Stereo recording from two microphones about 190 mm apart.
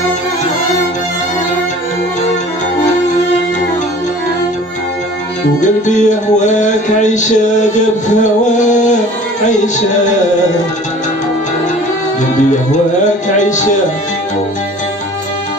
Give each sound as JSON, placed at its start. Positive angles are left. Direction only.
{"t": 5.6, "sound": "music", "side_deg": 40}
{"t": 13.4, "sound": "music", "side_deg": 40}